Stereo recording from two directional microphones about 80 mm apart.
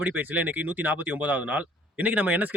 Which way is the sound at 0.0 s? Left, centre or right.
Right.